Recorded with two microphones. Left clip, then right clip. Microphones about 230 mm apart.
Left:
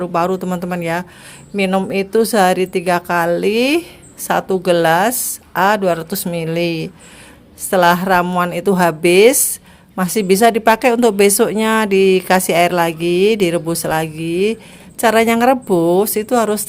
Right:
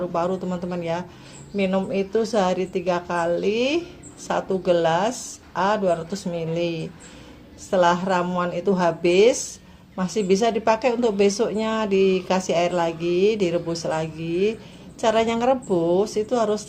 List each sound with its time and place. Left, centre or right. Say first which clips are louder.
0.0 s speech: left 7 dB; left